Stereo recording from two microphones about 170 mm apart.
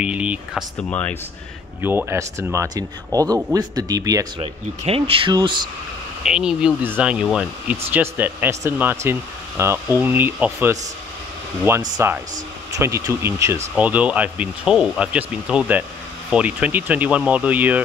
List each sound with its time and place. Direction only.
0.0 s speech: 5° right (ahead or behind)
0.8 s speech: 10° left (ahead or behind)
1.8 s speech: 10° right (ahead or behind)
4.4 s speech: 35° right (ahead or behind)
6.2 s speech: 5° right (ahead or behind)